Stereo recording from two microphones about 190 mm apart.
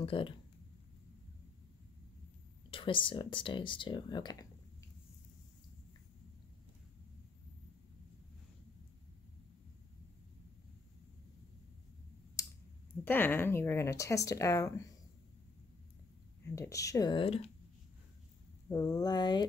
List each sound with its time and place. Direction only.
0.0 s speech: 30° left (ahead or behind)
2.7 s speech: 25° left (ahead or behind)
12.4 s clicking: 20° left (ahead or behind)
13.0 s speech: 10° left (ahead or behind)
16.5 s speech: 15° left (ahead or behind)
18.7 s speech: 20° left (ahead or behind)